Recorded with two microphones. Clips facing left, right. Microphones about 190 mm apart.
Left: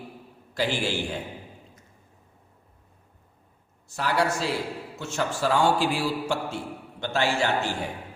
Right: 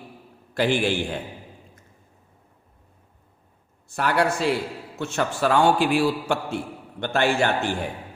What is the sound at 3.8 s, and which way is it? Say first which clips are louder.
A man's voice: right 3 dB; 60° right (ahead or behind).